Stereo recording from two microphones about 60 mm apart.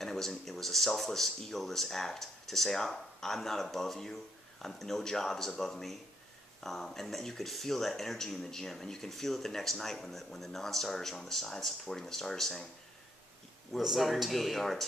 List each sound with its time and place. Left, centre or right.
0.0 s speech: centre
13.7 s speech: centre